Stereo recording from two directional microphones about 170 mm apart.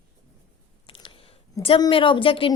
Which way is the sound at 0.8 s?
30° left (ahead or behind).